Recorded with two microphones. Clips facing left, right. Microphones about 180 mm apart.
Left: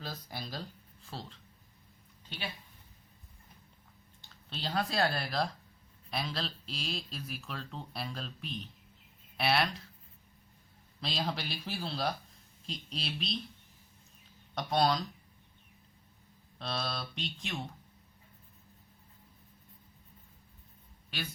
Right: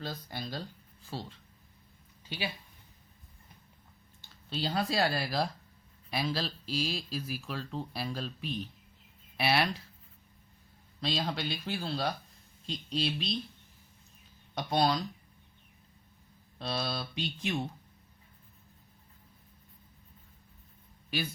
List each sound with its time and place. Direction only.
0.0 s speech: centre (ahead or behind)
4.4 s speech: 5° right (ahead or behind)
11.0 s speech: centre (ahead or behind)
14.5 s speech: centre (ahead or behind)
16.6 s speech: 5° right (ahead or behind)